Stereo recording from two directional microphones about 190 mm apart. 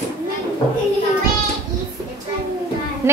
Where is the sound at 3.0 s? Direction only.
15° right (ahead or behind).